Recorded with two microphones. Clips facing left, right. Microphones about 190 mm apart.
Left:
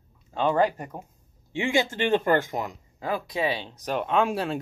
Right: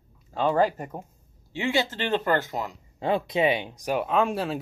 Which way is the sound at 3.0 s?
25° right (ahead or behind).